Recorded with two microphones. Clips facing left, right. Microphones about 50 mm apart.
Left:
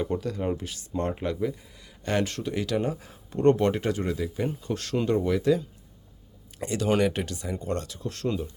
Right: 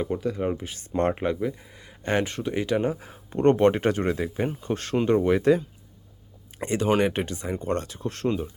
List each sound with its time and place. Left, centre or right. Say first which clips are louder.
0.0 s speech: right 2 dB; centre
0.9 s speech: right 5 dB; right
1.8 s speech: right 2 dB; right